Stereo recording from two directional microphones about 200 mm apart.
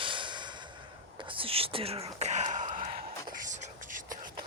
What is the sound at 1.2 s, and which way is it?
Speech, 25° right (ahead or behind).